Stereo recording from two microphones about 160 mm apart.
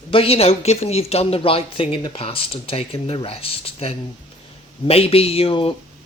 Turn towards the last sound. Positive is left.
turn(degrees=35)  # may be behind; listen again after turning